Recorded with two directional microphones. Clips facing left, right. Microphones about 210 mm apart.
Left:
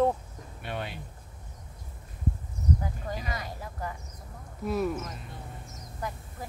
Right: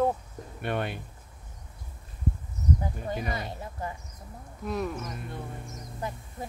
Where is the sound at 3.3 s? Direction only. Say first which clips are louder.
Right 2 dB; 25° right (ahead or behind).